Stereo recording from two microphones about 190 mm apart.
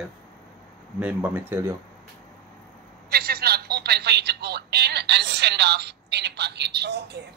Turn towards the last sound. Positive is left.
turn(degrees=-60)  # may be behind; listen again after turning